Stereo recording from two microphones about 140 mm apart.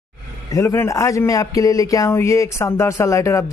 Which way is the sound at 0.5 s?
20° left (ahead or behind).